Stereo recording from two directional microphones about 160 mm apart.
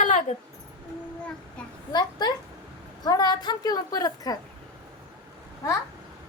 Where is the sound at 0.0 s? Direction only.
50° left (ahead or behind).